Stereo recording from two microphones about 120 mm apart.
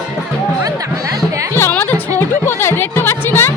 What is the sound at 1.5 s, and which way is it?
Music, 15° left (ahead or behind).